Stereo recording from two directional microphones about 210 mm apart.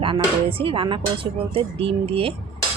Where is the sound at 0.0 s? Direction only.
25° right (ahead or behind).